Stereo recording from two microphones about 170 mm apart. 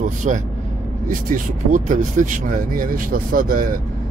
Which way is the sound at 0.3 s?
45° right (ahead or behind).